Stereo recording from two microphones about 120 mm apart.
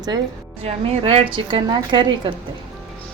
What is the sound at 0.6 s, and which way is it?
A woman's voice, 55° right (ahead or behind).